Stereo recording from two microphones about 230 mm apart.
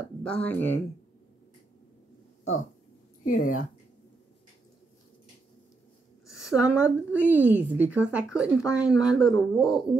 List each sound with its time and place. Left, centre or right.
0.2 s speech: centre
3.3 s speech: left
6.2 s a woman's voice: centre